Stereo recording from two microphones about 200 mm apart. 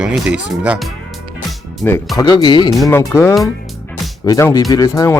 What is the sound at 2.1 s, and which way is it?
Speech, 20° left (ahead or behind).